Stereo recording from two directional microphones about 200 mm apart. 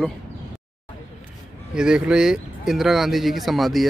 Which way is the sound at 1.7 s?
5° right (ahead or behind).